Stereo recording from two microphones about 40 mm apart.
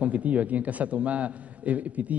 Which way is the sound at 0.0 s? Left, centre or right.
Right.